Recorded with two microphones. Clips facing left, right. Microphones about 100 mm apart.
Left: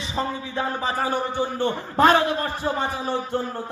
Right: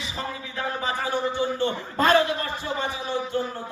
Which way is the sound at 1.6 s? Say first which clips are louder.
Left 4 dB; 50° left (ahead or behind).